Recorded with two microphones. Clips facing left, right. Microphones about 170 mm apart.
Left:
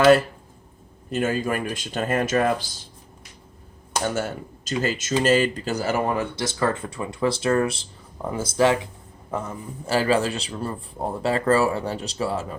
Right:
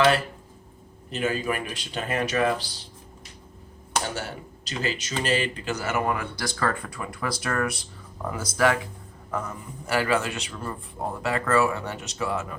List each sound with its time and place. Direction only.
1.1 s speech: 45° left (ahead or behind)
4.1 s a man's voice: 45° left (ahead or behind); by 12.5 s 30° left (ahead or behind)